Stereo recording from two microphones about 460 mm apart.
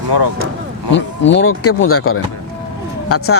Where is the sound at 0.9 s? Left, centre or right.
Left.